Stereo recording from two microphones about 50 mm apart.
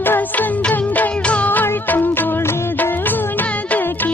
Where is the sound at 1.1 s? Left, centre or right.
Left.